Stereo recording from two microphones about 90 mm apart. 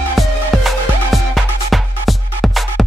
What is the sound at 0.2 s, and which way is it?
Music, centre (ahead or behind).